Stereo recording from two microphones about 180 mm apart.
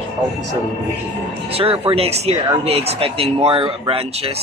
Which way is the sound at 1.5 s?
30° right (ahead or behind).